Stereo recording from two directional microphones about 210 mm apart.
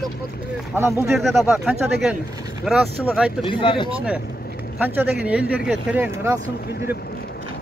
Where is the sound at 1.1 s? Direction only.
Centre (ahead or behind).